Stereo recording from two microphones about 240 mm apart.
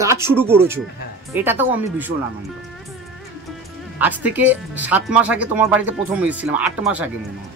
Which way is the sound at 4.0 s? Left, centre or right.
Centre.